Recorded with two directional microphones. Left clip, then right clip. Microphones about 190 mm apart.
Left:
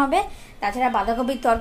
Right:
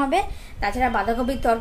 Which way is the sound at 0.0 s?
10° left (ahead or behind).